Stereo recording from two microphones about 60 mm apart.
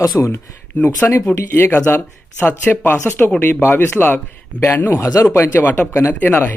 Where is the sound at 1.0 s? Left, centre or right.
Left.